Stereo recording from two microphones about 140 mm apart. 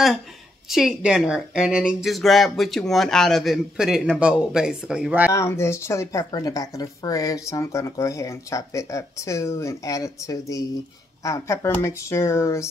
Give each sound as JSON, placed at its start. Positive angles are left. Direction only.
{"t": 0.7, "sound": "speech", "side_deg": 0}
{"t": 5.3, "sound": "speech", "side_deg": 20}